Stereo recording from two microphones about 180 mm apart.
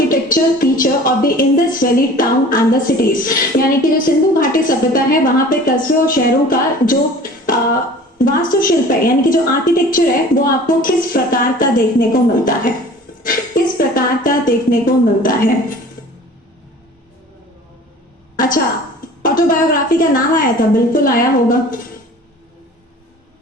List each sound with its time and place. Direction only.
0.1 s a woman's voice: 50° left (ahead or behind)
18.3 s a woman's voice: 50° left (ahead or behind)